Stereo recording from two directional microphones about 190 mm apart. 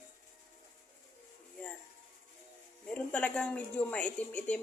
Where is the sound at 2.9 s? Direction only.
5° left (ahead or behind).